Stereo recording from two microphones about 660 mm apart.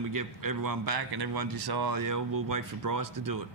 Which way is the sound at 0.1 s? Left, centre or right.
Right.